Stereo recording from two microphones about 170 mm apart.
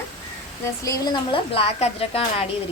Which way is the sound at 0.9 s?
25° left (ahead or behind).